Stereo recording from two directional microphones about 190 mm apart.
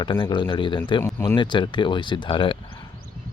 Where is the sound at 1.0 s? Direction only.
15° left (ahead or behind).